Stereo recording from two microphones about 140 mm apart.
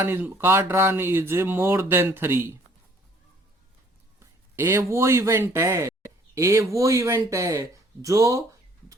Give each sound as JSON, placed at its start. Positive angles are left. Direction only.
{"t": 0.0, "sound": "speech", "side_deg": -15}
{"t": 4.2, "sound": "speech", "side_deg": -20}